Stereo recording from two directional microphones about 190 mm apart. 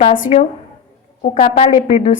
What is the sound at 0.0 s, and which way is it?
A woman's voice, 45° left (ahead or behind).